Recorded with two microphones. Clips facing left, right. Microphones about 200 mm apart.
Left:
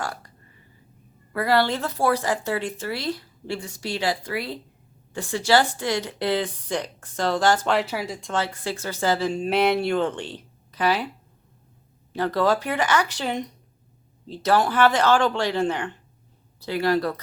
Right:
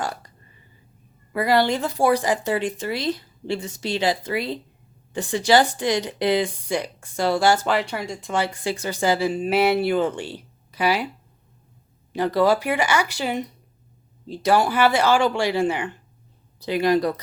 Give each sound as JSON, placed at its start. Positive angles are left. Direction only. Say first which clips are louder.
{"t": 0.0, "sound": "a sound", "louder": "right 3 dB", "side_deg": -20}
{"t": 1.3, "sound": "speech", "louder": "right 2 dB", "side_deg": -15}
{"t": 8.3, "sound": "speech", "louder": "right 4 dB", "side_deg": -15}
{"t": 12.1, "sound": "speech", "louder": "right 3 dB", "side_deg": -10}